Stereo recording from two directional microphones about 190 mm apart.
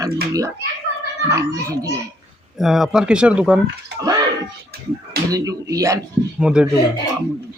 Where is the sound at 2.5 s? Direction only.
Centre (ahead or behind).